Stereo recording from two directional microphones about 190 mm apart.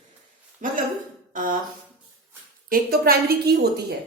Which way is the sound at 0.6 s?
45° right (ahead or behind).